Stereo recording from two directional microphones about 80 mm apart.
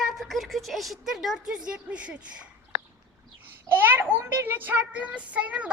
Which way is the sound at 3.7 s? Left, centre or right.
Right.